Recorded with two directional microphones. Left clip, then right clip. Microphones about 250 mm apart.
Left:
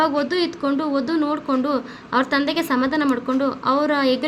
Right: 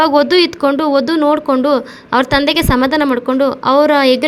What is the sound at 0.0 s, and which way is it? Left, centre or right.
Speech, right.